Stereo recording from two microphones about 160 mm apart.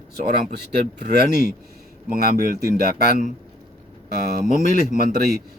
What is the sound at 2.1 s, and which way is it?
Speech, 65° right (ahead or behind).